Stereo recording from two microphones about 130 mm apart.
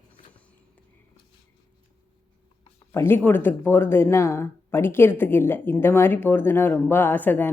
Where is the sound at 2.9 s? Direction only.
20° left (ahead or behind).